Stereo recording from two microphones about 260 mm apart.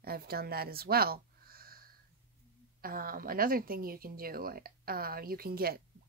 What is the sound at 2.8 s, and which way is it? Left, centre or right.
Speech, right.